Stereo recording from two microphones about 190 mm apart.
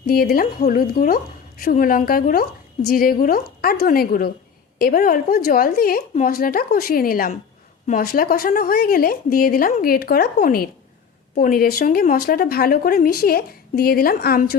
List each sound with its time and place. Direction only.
0.1 s speech: 50° left (ahead or behind)